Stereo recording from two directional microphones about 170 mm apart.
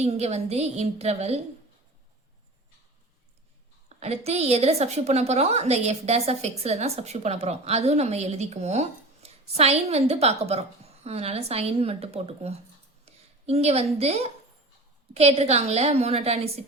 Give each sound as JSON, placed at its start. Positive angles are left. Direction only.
{"t": 0.0, "sound": "a woman's voice", "side_deg": -40}
{"t": 3.8, "sound": "a woman's voice", "side_deg": -40}